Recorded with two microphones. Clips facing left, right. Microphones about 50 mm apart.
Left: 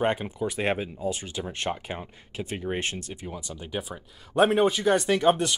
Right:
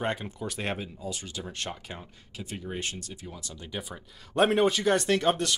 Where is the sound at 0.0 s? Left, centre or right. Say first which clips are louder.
Left 5 dB; left.